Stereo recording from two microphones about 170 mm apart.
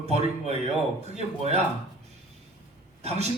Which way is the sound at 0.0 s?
40° right (ahead or behind).